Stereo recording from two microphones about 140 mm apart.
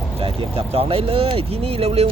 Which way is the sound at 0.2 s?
45° right (ahead or behind).